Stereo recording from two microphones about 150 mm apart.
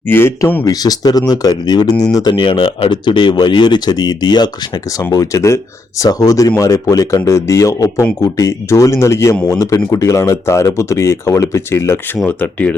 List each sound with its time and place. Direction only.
0.1 s speech: 15° left (ahead or behind)
0.7 s speech: 25° left (ahead or behind)